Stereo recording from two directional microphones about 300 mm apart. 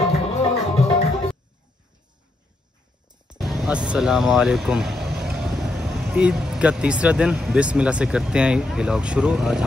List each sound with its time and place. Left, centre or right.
0.1 s music: centre
3.3 s speech: centre